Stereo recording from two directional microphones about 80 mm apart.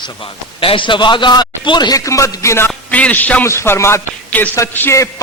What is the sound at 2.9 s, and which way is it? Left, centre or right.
Speech, centre.